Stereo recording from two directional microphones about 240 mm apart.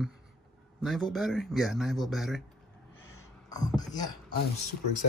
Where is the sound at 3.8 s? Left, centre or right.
Centre.